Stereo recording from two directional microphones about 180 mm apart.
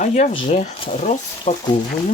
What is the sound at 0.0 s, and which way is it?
Speech, 40° left (ahead or behind).